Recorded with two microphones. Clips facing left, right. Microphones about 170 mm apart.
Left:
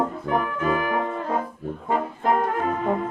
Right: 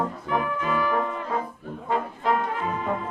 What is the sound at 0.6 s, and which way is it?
Brass instrument, 45° left (ahead or behind).